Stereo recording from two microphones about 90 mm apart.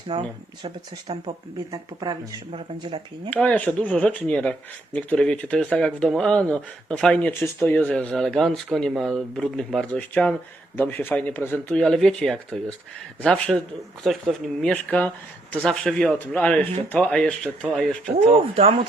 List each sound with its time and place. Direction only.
0.1 s speech: 55° right (ahead or behind)
3.2 s speech: 15° left (ahead or behind)
11.7 s speech: 5° left (ahead or behind)
14.0 s speech: centre (ahead or behind)
14.7 s speech: 15° left (ahead or behind)
16.1 s speech: 15° left (ahead or behind)
18.5 s a man's voice: 90° right